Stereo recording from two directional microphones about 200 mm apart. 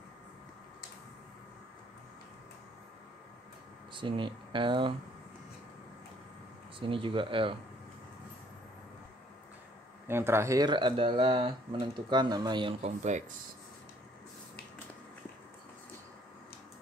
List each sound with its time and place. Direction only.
3.9 s speech: 25° right (ahead or behind)
6.8 s speech: 25° right (ahead or behind)
10.0 s speech: 10° right (ahead or behind); by 13.4 s 35° right (ahead or behind)